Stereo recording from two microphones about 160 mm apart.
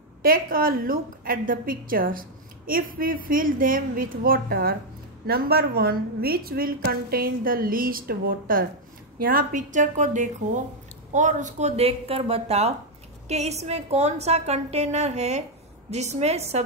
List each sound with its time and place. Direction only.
0.2 s a woman's voice: 65° right (ahead or behind); by 16.6 s 40° right (ahead or behind)